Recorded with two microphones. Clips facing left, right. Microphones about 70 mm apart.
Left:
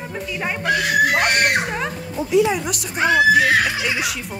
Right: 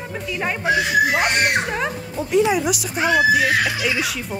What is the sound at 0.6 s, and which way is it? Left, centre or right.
Speech, left.